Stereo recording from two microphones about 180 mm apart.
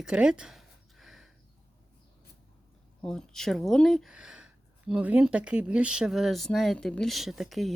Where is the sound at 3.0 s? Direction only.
5° left (ahead or behind).